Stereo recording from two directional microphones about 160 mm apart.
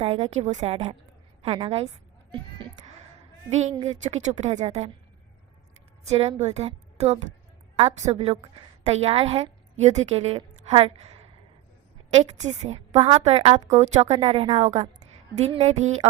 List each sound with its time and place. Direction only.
0.0 s a woman's voice: 35° right (ahead or behind)
3.5 s speech: 45° right (ahead or behind)
6.1 s a woman's voice: 40° right (ahead or behind)
12.1 s a woman's voice: 45° right (ahead or behind)